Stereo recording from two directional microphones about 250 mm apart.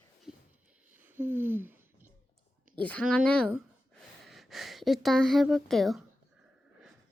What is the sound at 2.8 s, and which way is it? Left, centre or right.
Speech, centre.